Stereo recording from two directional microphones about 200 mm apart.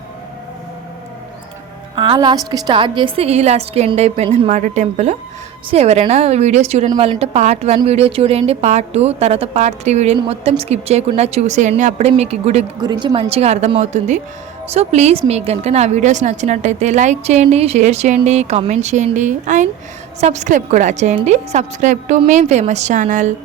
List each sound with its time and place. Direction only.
2.0 s a woman's voice: 20° right (ahead or behind)
12.8 s a woman's voice: 20° right (ahead or behind); by 23.3 s 40° right (ahead or behind)